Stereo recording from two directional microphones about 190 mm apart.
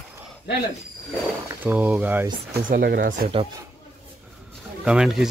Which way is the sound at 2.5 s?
50° right (ahead or behind).